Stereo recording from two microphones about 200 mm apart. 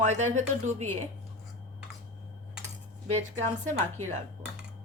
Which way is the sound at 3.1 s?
35° right (ahead or behind).